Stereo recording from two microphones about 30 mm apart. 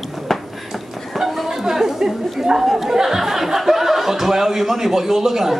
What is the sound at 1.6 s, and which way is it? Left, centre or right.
Chatter, centre.